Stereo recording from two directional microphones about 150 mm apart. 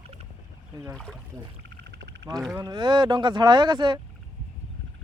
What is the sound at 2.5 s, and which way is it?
Speech, 30° right (ahead or behind).